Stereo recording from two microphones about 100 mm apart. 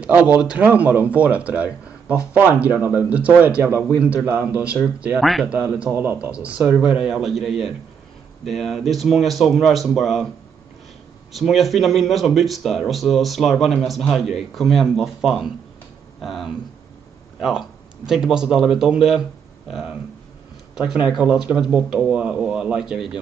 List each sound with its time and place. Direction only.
0.0 s speech: 15° right (ahead or behind)
4.7 s speech: 5° right (ahead or behind)
5.8 s a man's voice: 20° right (ahead or behind)
6.3 s speech: 10° right (ahead or behind)
11.3 s speech: centre (ahead or behind)